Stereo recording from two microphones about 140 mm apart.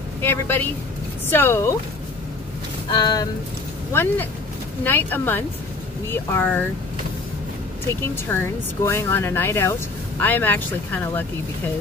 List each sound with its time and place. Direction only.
0.2 s speech: 15° left (ahead or behind)
2.9 s speech: 30° left (ahead or behind)
3.9 s speech: 15° left (ahead or behind)
8.3 s speech: 15° left (ahead or behind)